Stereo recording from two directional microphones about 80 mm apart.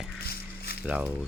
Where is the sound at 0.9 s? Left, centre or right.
Centre.